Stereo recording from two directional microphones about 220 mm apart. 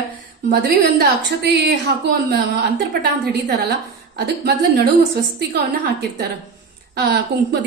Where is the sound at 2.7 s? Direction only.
45° right (ahead or behind).